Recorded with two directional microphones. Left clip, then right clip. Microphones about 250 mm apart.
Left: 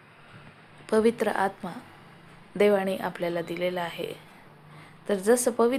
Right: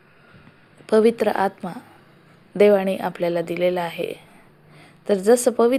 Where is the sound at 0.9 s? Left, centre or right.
Centre.